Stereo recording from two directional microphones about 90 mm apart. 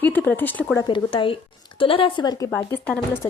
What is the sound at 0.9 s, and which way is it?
Speech, 65° left (ahead or behind).